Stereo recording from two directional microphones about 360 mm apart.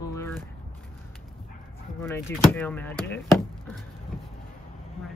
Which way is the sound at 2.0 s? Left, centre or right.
Centre.